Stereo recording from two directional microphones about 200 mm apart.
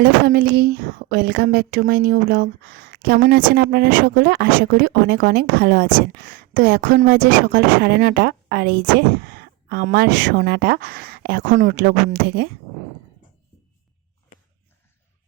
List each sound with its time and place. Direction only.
0.0 s a woman's voice: 50° right (ahead or behind)